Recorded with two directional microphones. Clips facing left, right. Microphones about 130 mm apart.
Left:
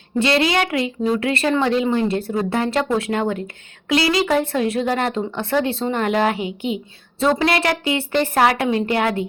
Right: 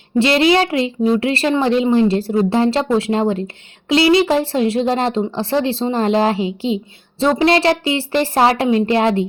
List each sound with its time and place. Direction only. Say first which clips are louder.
0.2 s speech: right 5 dB; 25° right (ahead or behind)